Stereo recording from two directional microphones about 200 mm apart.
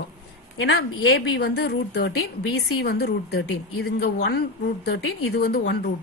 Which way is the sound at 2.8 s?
55° left (ahead or behind).